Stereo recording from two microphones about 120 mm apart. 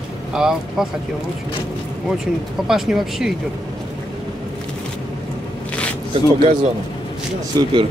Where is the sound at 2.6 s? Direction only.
5° right (ahead or behind).